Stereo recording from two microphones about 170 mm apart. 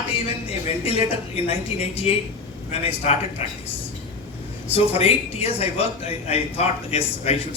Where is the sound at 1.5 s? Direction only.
35° left (ahead or behind).